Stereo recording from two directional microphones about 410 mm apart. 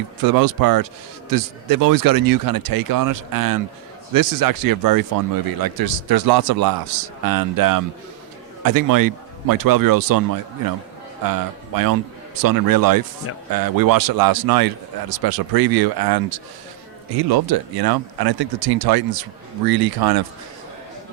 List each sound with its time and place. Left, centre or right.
0.2 s speech: right
11.3 s speech: right